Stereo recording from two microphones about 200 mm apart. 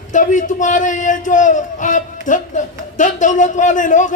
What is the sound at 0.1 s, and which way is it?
A man's voice, 40° left (ahead or behind).